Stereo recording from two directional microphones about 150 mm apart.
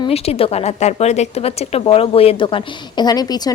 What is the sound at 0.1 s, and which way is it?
A woman's voice, 40° left (ahead or behind).